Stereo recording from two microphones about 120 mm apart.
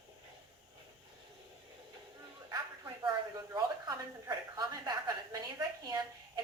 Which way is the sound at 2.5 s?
35° right (ahead or behind).